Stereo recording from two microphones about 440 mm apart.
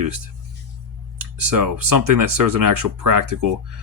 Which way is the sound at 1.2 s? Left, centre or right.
Right.